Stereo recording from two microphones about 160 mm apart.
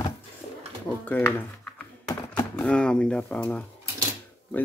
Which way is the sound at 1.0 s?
10° left (ahead or behind).